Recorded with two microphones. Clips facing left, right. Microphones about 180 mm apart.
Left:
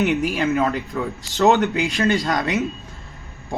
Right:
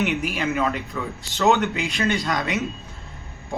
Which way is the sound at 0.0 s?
40° left (ahead or behind).